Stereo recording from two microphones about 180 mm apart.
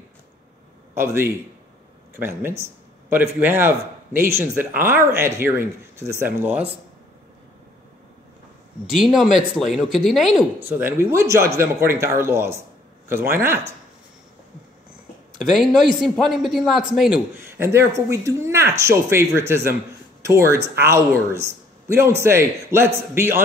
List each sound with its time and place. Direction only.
0.9 s speech: 15° right (ahead or behind)
4.1 s speech: 50° right (ahead or behind)
4.8 s speech: 15° right (ahead or behind)
8.8 s a man's voice: centre (ahead or behind)
10.6 s speech: 10° right (ahead or behind)
15.3 s a man's voice: centre (ahead or behind)
17.4 s speech: 15° right (ahead or behind)